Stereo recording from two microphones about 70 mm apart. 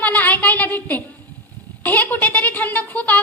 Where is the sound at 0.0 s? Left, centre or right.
Left.